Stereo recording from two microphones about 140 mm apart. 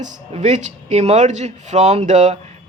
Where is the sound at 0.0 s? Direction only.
55° right (ahead or behind).